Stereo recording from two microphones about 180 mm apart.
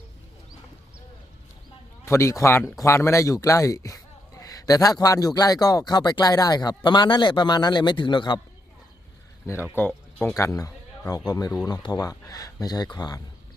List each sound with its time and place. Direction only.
2.0 s a man's voice: 15° left (ahead or behind)
9.7 s speech: 10° left (ahead or behind)